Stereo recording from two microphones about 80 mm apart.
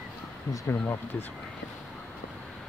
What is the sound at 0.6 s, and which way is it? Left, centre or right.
Speech, left.